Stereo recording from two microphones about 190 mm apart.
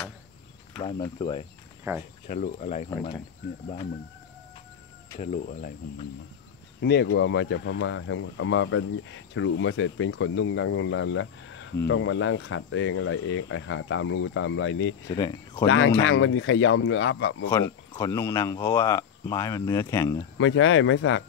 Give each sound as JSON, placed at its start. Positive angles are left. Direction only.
{"t": 0.8, "sound": "speech", "side_deg": 20}
{"t": 1.9, "sound": "cricket", "side_deg": -15}
{"t": 2.2, "sound": "speech", "side_deg": 40}
{"t": 5.2, "sound": "speech", "side_deg": 40}
{"t": 6.8, "sound": "speech", "side_deg": 60}
{"t": 15.0, "sound": "speech", "side_deg": 20}
{"t": 15.6, "sound": "speech", "side_deg": 90}
{"t": 17.5, "sound": "speech", "side_deg": 15}
{"t": 20.3, "sound": "speech", "side_deg": 90}